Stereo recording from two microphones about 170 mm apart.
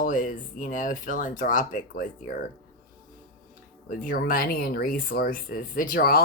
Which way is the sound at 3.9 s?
55° left (ahead or behind).